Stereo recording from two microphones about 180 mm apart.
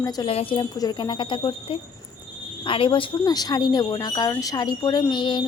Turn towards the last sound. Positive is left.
turn(degrees=25)  # may be behind; listen again after turning